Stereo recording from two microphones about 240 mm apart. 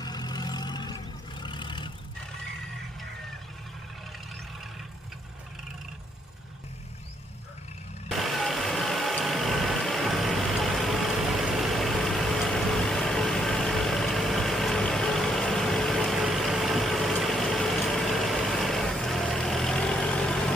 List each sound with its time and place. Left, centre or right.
0.0 s vehicle: centre
8.1 s vehicle: centre